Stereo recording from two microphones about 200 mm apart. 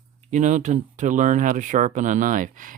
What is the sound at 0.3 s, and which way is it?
Speech, 40° right (ahead or behind).